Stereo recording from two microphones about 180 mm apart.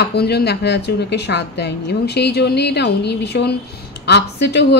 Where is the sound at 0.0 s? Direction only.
65° left (ahead or behind).